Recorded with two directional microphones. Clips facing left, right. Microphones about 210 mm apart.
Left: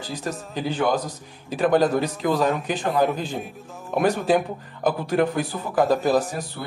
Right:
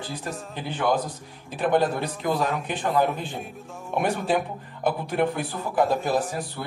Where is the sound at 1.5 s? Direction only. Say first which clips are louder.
Left 4 dB; 90° left.